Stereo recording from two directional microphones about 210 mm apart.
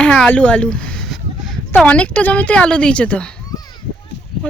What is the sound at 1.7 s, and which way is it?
A woman's voice, 5° left (ahead or behind).